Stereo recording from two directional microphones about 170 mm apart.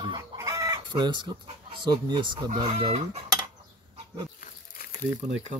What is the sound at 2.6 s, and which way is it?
Speech, 35° right (ahead or behind).